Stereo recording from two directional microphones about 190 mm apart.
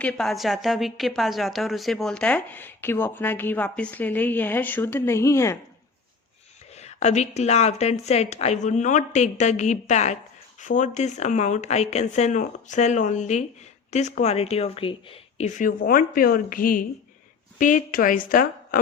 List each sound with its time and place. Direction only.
0.0 s a woman's voice: 5° left (ahead or behind)
6.7 s a woman's voice: 35° left (ahead or behind)